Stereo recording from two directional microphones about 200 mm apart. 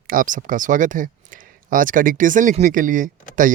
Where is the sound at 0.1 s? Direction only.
40° right (ahead or behind).